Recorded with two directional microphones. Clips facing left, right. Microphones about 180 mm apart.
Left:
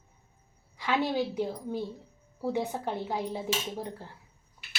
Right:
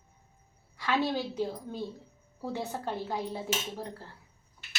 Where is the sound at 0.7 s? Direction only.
15° left (ahead or behind).